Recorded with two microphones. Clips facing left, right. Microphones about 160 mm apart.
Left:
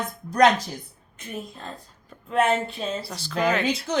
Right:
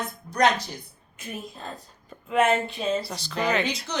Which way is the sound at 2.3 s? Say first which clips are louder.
Even; centre (ahead or behind).